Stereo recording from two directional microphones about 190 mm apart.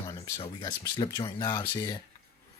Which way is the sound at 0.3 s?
30° left (ahead or behind).